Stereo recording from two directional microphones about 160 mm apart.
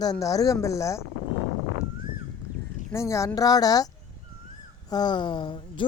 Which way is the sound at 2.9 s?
20° left (ahead or behind).